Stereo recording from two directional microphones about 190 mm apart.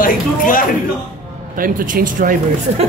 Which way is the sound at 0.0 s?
45° left (ahead or behind).